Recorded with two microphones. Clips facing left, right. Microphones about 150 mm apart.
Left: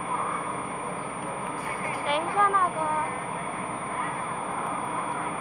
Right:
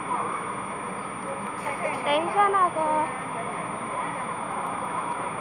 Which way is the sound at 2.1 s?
10° right (ahead or behind).